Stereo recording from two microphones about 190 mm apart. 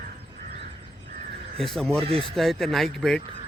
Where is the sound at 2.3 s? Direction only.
Centre (ahead or behind).